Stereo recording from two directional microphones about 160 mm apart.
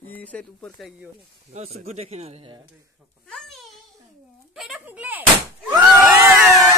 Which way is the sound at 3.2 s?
Centre (ahead or behind).